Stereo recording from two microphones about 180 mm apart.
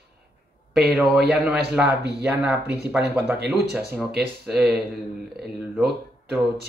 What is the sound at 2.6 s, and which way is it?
Speech, 65° right (ahead or behind).